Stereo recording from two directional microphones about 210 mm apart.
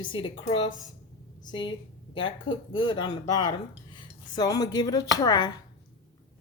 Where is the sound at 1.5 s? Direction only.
20° left (ahead or behind).